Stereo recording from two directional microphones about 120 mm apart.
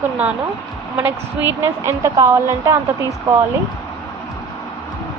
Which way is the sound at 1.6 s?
25° right (ahead or behind).